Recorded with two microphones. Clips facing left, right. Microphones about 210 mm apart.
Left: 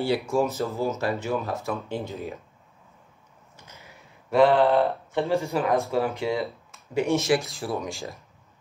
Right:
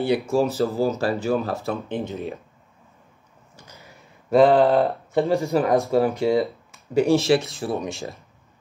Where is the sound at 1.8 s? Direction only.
20° right (ahead or behind).